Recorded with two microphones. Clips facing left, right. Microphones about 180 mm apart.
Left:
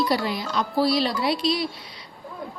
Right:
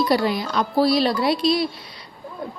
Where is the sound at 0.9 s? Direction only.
45° right (ahead or behind).